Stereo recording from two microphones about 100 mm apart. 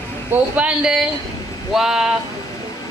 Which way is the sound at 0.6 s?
10° right (ahead or behind).